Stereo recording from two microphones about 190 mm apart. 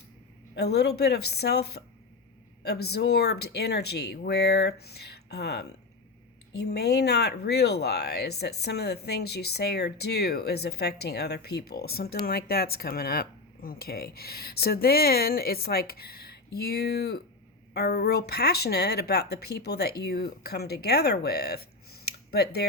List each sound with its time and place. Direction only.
0.5 s speech: 60° left (ahead or behind)